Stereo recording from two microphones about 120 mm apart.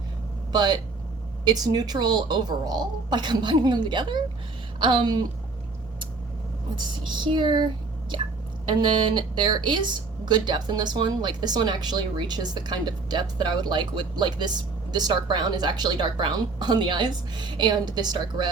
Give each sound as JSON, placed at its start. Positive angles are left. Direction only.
{"t": 0.5, "sound": "speech", "side_deg": -35}
{"t": 6.7, "sound": "speech", "side_deg": -40}